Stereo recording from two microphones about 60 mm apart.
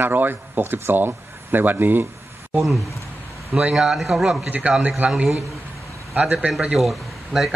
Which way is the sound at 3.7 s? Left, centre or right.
Centre.